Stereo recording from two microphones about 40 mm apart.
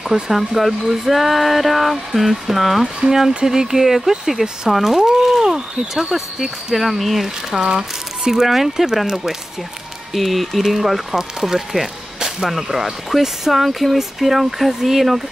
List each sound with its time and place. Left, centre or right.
0.1 s speech: centre
7.6 s speech: right
8.3 s speech: centre